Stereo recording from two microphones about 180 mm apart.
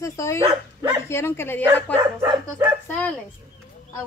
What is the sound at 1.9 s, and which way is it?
Speech, 15° right (ahead or behind).